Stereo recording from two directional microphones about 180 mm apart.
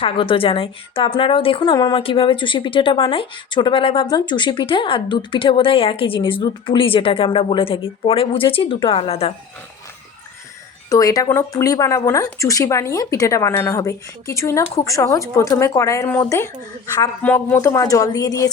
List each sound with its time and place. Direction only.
0.0 s a woman's voice: 30° left (ahead or behind)
10.8 s a woman's voice: 20° left (ahead or behind)